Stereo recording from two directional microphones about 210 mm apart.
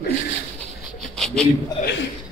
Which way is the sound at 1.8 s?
35° left (ahead or behind).